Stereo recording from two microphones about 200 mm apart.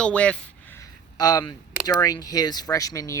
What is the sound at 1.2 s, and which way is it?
Speech, 20° left (ahead or behind).